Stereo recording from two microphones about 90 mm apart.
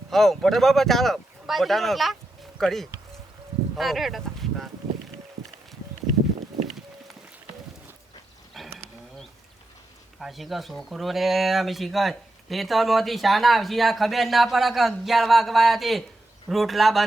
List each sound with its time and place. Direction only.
0.1 s speech: 5° left (ahead or behind)
3.8 s a sound: centre (ahead or behind)
8.6 s livestock: centre (ahead or behind)
10.2 s speech: centre (ahead or behind)